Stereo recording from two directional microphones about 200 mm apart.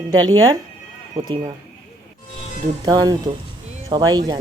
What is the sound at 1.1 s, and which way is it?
Speech, 25° right (ahead or behind).